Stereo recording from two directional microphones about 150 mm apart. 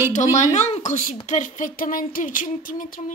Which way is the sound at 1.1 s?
55° left (ahead or behind).